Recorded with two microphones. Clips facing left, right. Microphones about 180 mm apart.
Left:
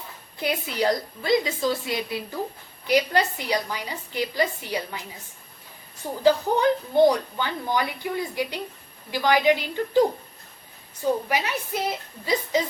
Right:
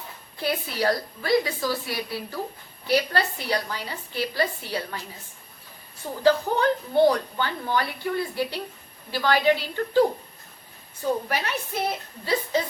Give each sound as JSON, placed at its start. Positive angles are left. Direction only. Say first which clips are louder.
{"t": 0.3, "sound": "a woman's voice", "louder": "left 1 dB", "side_deg": 20}
{"t": 11.3, "sound": "a woman's voice", "louder": "left 2 dB", "side_deg": 15}